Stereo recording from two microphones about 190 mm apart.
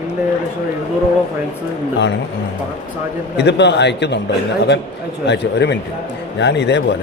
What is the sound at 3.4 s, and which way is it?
Speech, 65° left (ahead or behind).